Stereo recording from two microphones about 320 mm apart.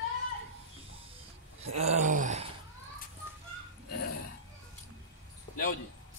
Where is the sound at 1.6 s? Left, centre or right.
Centre.